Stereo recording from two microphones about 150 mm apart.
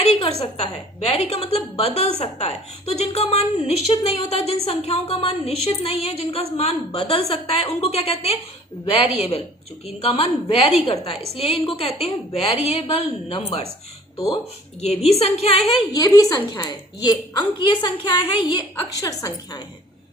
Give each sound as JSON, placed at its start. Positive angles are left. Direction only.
{"t": 0.0, "sound": "a woman's voice", "side_deg": 45}
{"t": 14.8, "sound": "a woman's voice", "side_deg": 45}
{"t": 16.0, "sound": "a woman's voice", "side_deg": 25}